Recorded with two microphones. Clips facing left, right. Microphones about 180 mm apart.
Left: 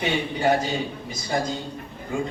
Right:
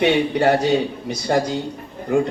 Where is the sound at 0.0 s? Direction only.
70° right (ahead or behind).